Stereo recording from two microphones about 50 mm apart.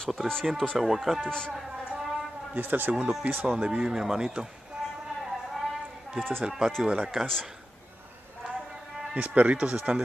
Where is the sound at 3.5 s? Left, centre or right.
Centre.